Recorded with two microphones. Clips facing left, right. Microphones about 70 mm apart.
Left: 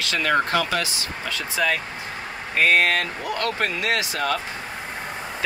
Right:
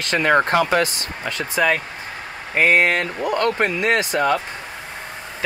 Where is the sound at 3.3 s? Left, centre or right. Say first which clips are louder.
Right 5 dB; right.